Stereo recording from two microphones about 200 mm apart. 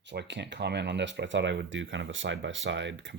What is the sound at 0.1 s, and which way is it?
Speech, 60° right (ahead or behind).